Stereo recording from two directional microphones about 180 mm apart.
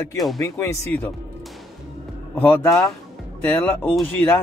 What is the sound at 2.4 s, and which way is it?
Speech, 10° left (ahead or behind).